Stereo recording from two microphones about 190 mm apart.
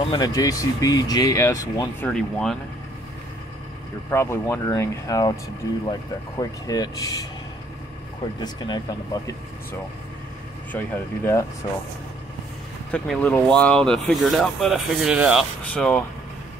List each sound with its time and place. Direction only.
0.0 s speech: 20° left (ahead or behind)
2.0 s speech: 5° left (ahead or behind)
4.1 s speech: 15° left (ahead or behind)
8.4 s speech: 20° left (ahead or behind)
10.7 s speech: 10° left (ahead or behind)
12.9 s speech: 5° left (ahead or behind)
15.6 s speech: 5° left (ahead or behind)